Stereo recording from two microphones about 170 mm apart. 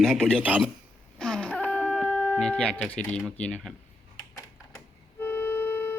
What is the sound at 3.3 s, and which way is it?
Speech, 5° left (ahead or behind).